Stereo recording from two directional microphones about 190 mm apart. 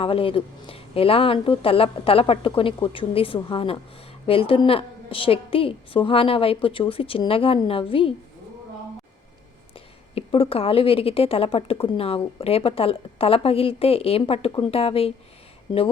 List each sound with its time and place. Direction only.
0.0 s a woman's voice: 30° left (ahead or behind)
9.7 s a woman's voice: 30° left (ahead or behind)